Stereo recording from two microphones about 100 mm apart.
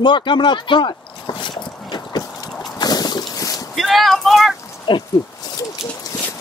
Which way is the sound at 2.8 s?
45° left (ahead or behind).